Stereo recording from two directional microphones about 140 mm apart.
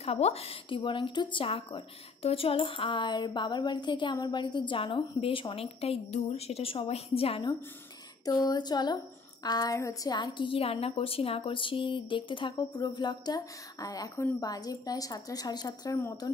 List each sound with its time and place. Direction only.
0.0 s speech: 45° left (ahead or behind)
8.3 s a woman's voice: 30° left (ahead or behind)